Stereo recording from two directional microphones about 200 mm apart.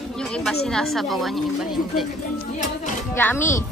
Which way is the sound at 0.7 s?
Centre (ahead or behind).